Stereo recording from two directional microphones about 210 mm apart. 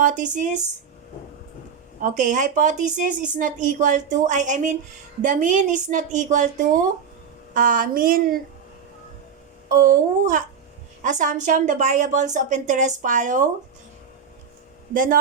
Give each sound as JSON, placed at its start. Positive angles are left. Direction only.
{"t": 0.0, "sound": "a woman's voice", "side_deg": -35}
{"t": 2.0, "sound": "a woman's voice", "side_deg": -40}
{"t": 9.6, "sound": "a woman's voice", "side_deg": -40}
{"t": 14.9, "sound": "a woman's voice", "side_deg": -40}